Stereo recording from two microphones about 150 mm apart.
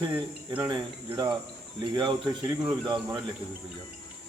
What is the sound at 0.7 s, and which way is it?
Speech, 30° right (ahead or behind).